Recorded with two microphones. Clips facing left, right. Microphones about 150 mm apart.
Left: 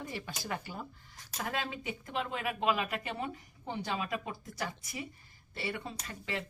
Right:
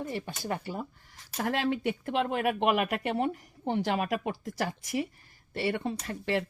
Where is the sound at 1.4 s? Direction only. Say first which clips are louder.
Right 8 dB; 65° right (ahead or behind); by 5.0 s 85° right.